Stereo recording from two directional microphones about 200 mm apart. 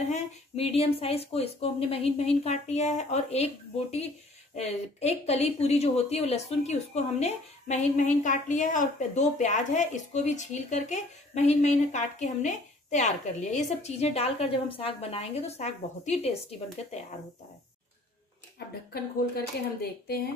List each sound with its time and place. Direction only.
0.1 s speech: 30° left (ahead or behind)
19.3 s speech: 50° left (ahead or behind)